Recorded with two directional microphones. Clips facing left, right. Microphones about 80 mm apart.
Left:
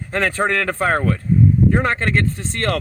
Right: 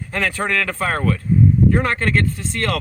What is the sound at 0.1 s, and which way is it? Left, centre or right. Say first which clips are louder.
Speech: left 3 dB; left.